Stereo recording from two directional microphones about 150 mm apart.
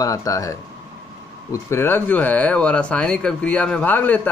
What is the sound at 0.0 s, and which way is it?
Speech, 20° left (ahead or behind).